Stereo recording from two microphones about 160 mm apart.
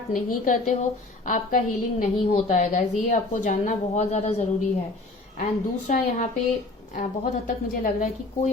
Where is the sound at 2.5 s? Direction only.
40° left (ahead or behind).